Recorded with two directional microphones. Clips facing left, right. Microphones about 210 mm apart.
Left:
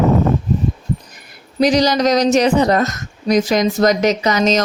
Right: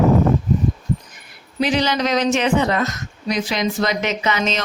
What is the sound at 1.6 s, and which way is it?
Speech, 40° left (ahead or behind).